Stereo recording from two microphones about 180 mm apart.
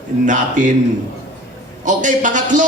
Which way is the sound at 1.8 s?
45° right (ahead or behind).